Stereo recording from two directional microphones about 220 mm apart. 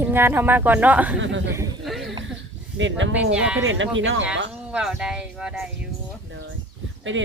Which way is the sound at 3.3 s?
5° right (ahead or behind).